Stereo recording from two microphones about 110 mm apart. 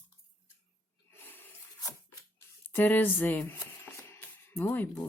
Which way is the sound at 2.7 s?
15° left (ahead or behind).